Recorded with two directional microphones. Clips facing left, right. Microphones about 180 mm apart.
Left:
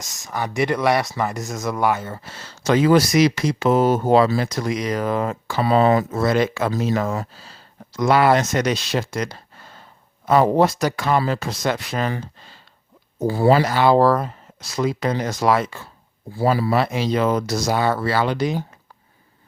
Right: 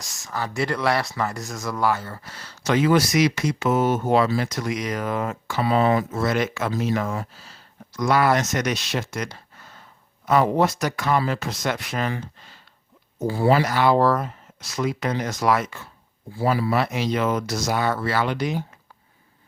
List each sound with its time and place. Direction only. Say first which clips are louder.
0.0 s speech: left 3 dB; 15° left (ahead or behind); by 18.6 s 35° left (ahead or behind)